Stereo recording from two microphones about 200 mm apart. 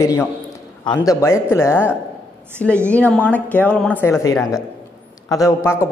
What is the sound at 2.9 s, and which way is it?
A man's voice, 5° left (ahead or behind).